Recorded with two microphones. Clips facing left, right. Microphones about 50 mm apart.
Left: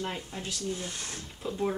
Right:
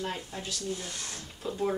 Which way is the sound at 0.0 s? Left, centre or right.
Centre.